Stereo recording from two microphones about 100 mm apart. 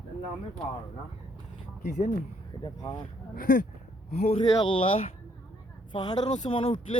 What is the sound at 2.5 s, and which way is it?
Speech, 45° left (ahead or behind).